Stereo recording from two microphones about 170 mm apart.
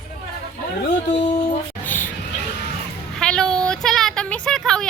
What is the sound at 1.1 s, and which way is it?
Music, 25° left (ahead or behind).